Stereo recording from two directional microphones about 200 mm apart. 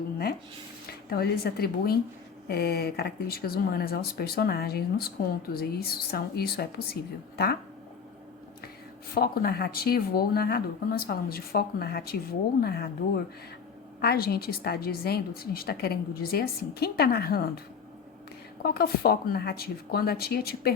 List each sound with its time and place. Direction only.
1.1 s a woman's voice: 50° left (ahead or behind)
9.1 s a woman's voice: 50° left (ahead or behind)
14.0 s a woman's voice: 50° left (ahead or behind)
18.6 s a woman's voice: 50° left (ahead or behind)